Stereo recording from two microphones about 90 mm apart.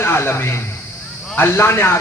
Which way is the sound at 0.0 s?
25° left (ahead or behind).